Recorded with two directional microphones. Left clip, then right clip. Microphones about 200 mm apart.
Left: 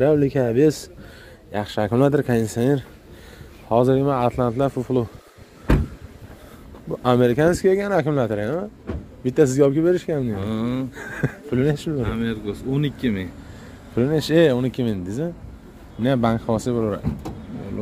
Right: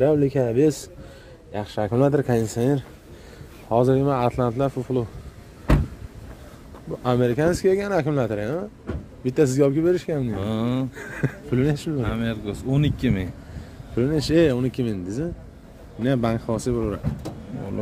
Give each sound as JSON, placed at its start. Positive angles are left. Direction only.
{"t": 0.0, "sound": "speech", "side_deg": 15}
{"t": 1.5, "sound": "speech", "side_deg": 25}
{"t": 4.6, "sound": "speech", "side_deg": 25}
{"t": 7.0, "sound": "speech", "side_deg": 30}
{"t": 7.5, "sound": "speech", "side_deg": 10}
{"t": 8.9, "sound": "speech", "side_deg": -55}
{"t": 9.2, "sound": "speech", "side_deg": 15}
{"t": 10.3, "sound": "speech", "side_deg": -35}
{"t": 11.0, "sound": "speech", "side_deg": 10}
{"t": 12.0, "sound": "speech", "side_deg": -50}
{"t": 13.9, "sound": "speech", "side_deg": 15}